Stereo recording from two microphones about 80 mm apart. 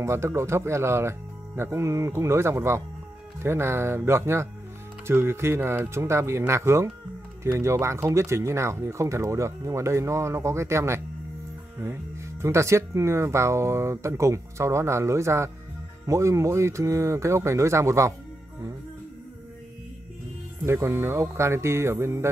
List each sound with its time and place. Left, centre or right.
0.0 s speech: right
20.6 s speech: right